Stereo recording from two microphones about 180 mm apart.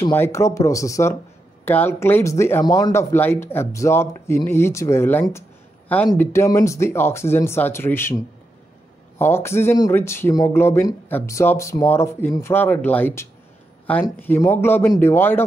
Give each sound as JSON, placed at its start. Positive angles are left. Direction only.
{"t": 0.0, "sound": "speech", "side_deg": 15}
{"t": 9.2, "sound": "speech", "side_deg": 15}